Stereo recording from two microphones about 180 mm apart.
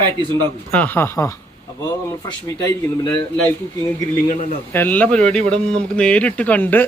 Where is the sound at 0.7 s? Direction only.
10° left (ahead or behind).